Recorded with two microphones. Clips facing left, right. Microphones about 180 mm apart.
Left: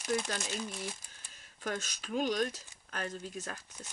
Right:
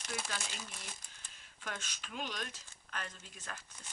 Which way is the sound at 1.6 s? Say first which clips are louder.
Left 8 dB; 40° left (ahead or behind).